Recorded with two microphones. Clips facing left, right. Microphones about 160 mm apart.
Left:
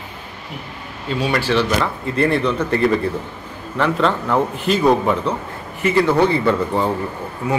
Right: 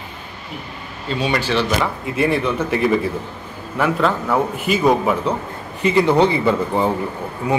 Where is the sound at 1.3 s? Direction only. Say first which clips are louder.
Left 2 dB; 10° right (ahead or behind).